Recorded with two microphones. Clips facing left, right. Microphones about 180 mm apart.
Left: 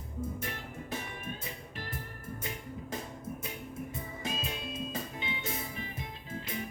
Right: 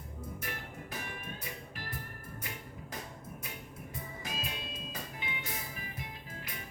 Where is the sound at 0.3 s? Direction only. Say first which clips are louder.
Left 3 dB; 25° left (ahead or behind).